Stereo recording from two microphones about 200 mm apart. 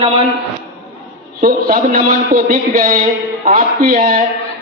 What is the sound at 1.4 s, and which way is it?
A man's voice, 45° right (ahead or behind).